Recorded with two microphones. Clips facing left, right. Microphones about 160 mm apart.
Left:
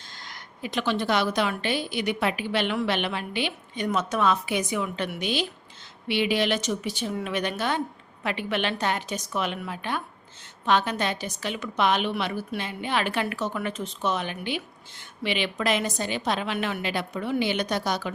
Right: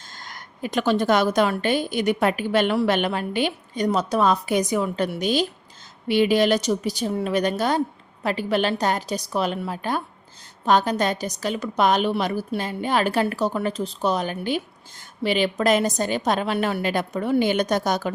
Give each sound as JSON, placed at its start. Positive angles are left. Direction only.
{"t": 0.2, "sound": "a woman's voice", "side_deg": -45}